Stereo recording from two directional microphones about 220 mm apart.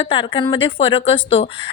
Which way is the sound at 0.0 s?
25° left (ahead or behind).